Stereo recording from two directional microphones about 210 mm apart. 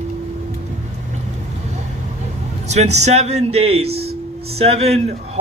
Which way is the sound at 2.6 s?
30° right (ahead or behind).